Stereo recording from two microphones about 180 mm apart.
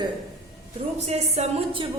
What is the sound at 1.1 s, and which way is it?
Speech, 35° right (ahead or behind).